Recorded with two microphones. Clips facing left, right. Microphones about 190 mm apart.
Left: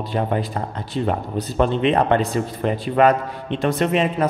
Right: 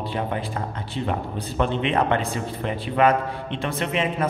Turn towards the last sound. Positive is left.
turn(degrees=40)  # may be behind; listen again after turning